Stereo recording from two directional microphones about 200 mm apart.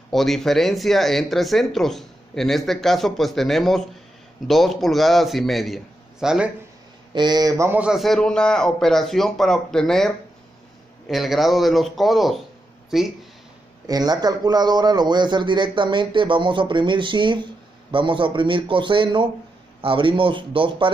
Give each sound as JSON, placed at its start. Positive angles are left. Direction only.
{"t": 0.1, "sound": "speech", "side_deg": 0}
{"t": 7.2, "sound": "speech", "side_deg": -20}
{"t": 13.8, "sound": "a man's voice", "side_deg": -20}